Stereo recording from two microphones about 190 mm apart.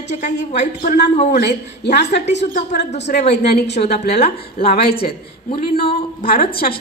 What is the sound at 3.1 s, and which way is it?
Speech, 45° left (ahead or behind).